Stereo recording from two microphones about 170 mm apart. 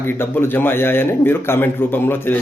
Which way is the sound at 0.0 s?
15° left (ahead or behind).